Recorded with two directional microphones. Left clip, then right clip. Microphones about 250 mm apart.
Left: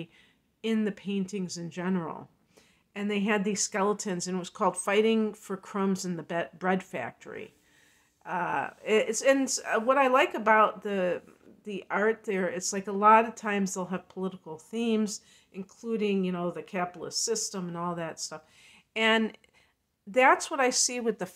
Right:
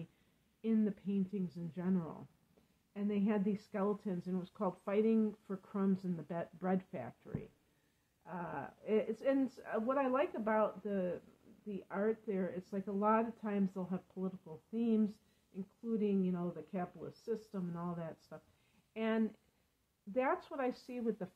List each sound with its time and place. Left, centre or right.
0.6 s speech: centre